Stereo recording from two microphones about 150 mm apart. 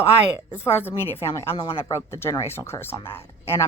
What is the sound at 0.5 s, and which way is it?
Speech, 15° left (ahead or behind).